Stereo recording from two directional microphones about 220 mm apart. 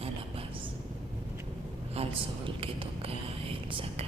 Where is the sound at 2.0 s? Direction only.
25° right (ahead or behind).